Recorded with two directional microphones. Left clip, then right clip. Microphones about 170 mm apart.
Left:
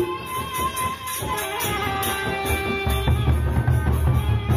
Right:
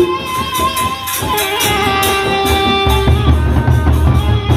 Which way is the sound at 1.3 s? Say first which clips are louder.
Right 12 dB; 55° right (ahead or behind).